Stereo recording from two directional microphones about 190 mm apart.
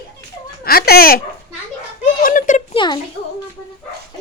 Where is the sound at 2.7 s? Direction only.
25° left (ahead or behind).